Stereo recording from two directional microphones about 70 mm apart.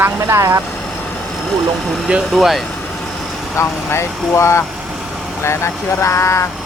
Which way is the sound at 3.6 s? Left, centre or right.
Left.